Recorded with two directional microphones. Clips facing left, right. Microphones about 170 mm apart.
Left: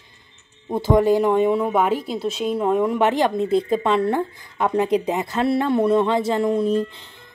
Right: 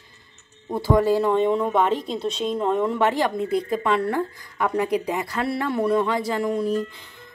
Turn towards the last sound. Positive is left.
turn(degrees=25)  # may be behind; listen again after turning